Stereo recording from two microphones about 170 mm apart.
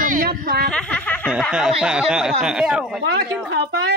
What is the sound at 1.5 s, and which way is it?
A man's voice, 5° right (ahead or behind).